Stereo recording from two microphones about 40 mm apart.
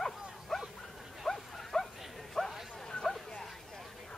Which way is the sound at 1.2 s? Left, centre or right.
Centre.